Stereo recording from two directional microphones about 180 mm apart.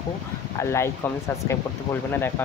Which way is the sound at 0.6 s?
15° left (ahead or behind).